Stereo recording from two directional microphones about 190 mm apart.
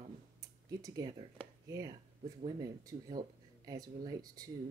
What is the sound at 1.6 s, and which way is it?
Speech, 15° right (ahead or behind).